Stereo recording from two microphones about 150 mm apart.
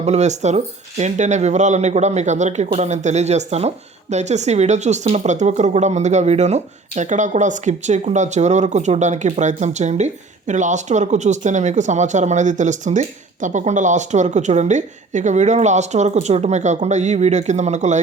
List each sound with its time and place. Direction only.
0.0 s speech: 50° right (ahead or behind)